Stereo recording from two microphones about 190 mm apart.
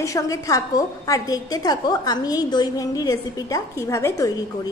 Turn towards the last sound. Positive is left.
turn(degrees=15)  # may be behind; listen again after turning